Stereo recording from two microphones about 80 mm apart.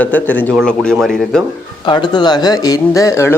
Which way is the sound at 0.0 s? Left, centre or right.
Left.